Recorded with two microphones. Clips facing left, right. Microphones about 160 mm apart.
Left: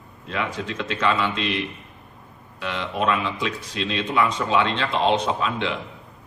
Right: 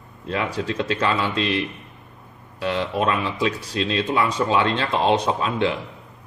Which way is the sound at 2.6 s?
40° right (ahead or behind).